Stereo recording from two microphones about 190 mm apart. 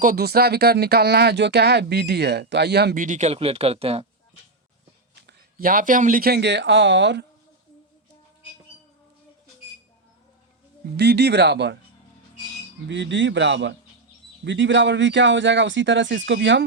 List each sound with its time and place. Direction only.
0.0 s speech: 50° right (ahead or behind); by 4.0 s 30° right (ahead or behind)
5.2 s speech: 50° right (ahead or behind); by 7.3 s 70° right (ahead or behind)
10.9 s speech: 60° right (ahead or behind)
12.9 s speech: 70° right (ahead or behind)